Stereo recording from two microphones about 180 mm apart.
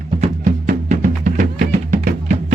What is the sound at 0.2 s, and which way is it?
Music, 45° right (ahead or behind).